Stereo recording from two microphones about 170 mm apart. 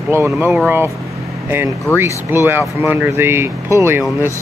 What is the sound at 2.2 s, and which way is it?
Speech, 15° right (ahead or behind).